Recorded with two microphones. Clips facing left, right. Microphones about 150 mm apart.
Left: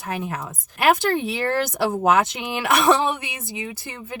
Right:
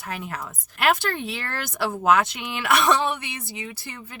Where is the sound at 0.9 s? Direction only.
20° left (ahead or behind).